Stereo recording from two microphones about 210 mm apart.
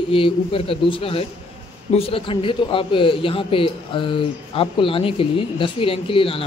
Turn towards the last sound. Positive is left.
turn(degrees=25)  # may be behind; listen again after turning